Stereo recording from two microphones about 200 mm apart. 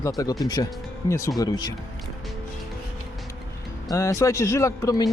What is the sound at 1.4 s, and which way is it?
Speech, 20° left (ahead or behind).